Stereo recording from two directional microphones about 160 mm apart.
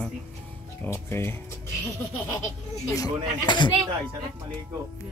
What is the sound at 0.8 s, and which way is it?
Speech, 15° left (ahead or behind).